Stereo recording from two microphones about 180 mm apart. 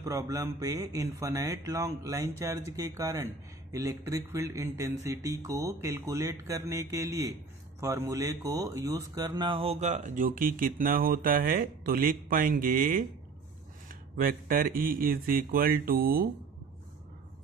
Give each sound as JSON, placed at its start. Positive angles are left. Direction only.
{"t": 0.0, "sound": "speech", "side_deg": -20}